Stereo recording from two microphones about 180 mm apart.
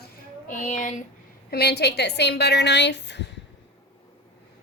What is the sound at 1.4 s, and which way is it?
A woman's voice, 60° left (ahead or behind).